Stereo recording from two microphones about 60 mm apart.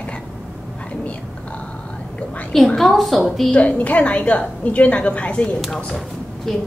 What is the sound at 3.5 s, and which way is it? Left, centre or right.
A woman's voice, left.